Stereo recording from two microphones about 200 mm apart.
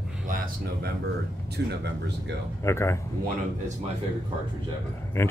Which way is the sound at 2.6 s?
15° left (ahead or behind).